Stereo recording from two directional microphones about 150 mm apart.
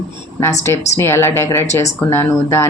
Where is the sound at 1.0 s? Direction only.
15° left (ahead or behind).